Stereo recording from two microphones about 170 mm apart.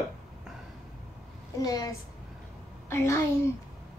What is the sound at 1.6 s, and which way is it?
A woman's voice, 20° left (ahead or behind).